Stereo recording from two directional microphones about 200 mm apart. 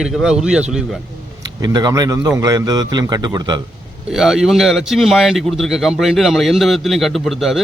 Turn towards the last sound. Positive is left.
turn(degrees=0)  # may be behind; listen again after turning